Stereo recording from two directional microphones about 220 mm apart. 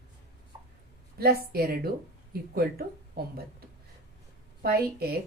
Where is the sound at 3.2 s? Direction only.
45° right (ahead or behind).